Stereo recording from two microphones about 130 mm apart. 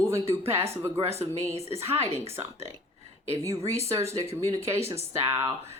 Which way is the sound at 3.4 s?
25° right (ahead or behind).